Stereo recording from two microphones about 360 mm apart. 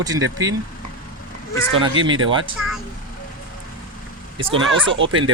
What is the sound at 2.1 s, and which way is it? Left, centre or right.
Speech, right.